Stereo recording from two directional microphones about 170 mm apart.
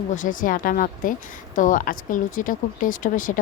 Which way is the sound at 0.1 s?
50° left (ahead or behind).